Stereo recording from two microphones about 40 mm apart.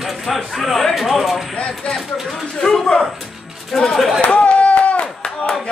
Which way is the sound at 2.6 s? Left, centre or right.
Centre.